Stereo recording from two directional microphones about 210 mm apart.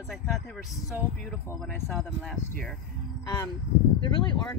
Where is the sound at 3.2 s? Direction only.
20° left (ahead or behind).